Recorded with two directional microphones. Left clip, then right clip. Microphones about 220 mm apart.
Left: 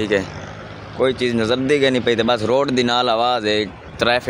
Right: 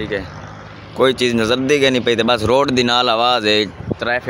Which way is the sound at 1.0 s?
15° right (ahead or behind).